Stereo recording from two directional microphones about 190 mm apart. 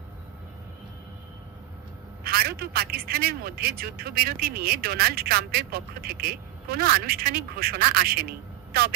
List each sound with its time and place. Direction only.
2.2 s a man's voice: 55° right (ahead or behind)